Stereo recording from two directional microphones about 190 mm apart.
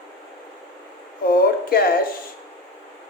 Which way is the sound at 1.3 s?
50° left (ahead or behind).